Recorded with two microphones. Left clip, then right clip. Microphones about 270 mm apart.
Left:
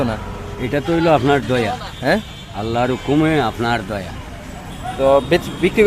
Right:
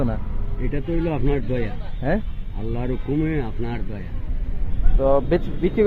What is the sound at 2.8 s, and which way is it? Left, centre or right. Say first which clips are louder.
Speech: left 7 dB; left.